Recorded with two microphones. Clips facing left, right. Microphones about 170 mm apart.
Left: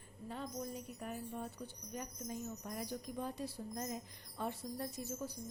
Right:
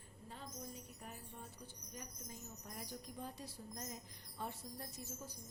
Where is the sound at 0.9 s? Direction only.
75° left (ahead or behind).